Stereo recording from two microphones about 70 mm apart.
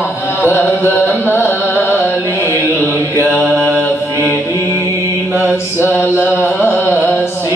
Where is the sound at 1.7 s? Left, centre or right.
Left.